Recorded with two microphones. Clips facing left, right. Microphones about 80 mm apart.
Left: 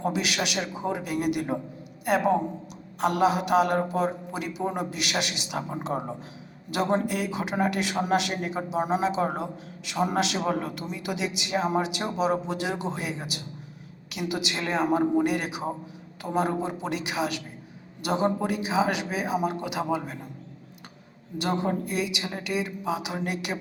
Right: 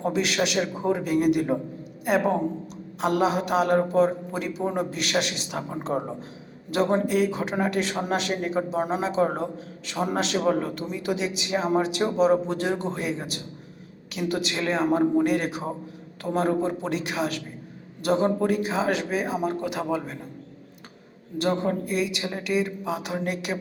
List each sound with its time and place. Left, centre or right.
0.0 s a man's voice: centre
8.8 s speech: centre
9.0 s a man's voice: centre
21.6 s a man's voice: centre